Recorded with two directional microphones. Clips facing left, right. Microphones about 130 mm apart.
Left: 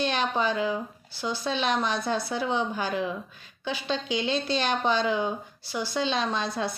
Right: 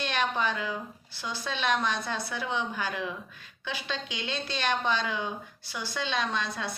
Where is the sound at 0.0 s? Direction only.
30° left (ahead or behind).